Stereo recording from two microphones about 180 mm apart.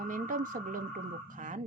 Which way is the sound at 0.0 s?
45° right (ahead or behind).